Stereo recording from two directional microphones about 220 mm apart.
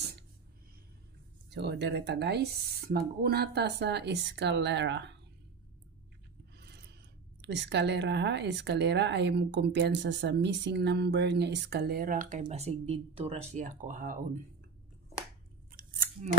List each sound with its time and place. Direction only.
1.5 s speech: 50° right (ahead or behind)
7.4 s speech: 50° right (ahead or behind)
15.7 s scissors: 40° right (ahead or behind)